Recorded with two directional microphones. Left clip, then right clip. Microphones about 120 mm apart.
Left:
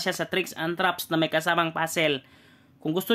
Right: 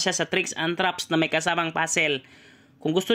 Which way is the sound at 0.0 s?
20° right (ahead or behind).